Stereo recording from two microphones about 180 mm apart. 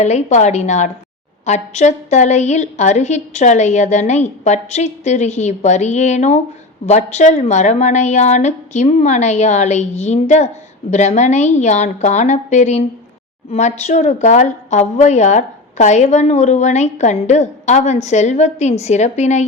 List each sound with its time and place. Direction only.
0.0 s a woman's voice: 40° left (ahead or behind)